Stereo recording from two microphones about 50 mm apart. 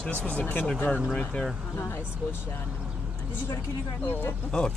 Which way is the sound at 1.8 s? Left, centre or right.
Left.